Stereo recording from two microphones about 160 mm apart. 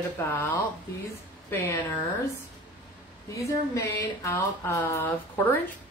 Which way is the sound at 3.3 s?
20° left (ahead or behind).